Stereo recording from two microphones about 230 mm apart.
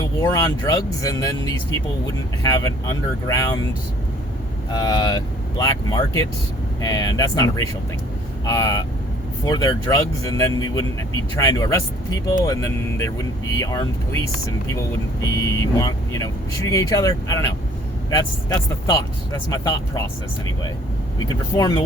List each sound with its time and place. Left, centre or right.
0.2 s speech: centre
4.8 s speech: centre
15.4 s speech: centre
21.5 s speech: centre